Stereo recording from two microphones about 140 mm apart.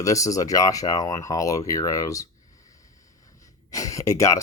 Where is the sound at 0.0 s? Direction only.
25° left (ahead or behind).